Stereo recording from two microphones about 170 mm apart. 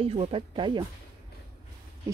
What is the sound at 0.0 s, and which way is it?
Speech, 35° right (ahead or behind).